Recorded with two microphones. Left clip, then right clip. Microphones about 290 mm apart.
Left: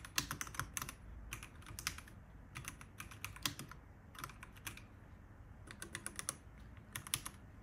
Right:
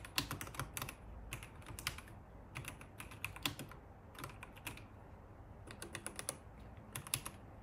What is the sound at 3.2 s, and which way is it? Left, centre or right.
Typing, centre.